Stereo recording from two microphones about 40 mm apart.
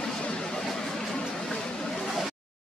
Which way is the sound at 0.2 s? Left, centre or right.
Centre.